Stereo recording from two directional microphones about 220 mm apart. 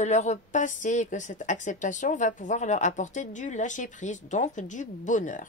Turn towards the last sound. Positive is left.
turn(degrees=35)  # may be behind; listen again after turning